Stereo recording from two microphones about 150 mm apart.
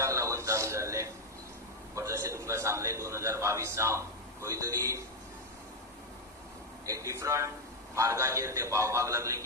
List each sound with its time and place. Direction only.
0.0 s a sound: 20° right (ahead or behind)
2.0 s a man's voice: 20° right (ahead or behind)
6.8 s a man's voice: 20° right (ahead or behind)